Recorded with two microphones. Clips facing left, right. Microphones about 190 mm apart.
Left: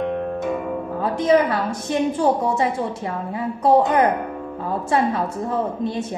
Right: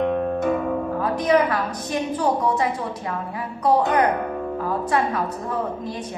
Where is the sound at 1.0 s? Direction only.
25° left (ahead or behind).